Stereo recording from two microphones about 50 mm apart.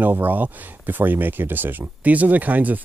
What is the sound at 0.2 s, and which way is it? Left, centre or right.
Speech, right.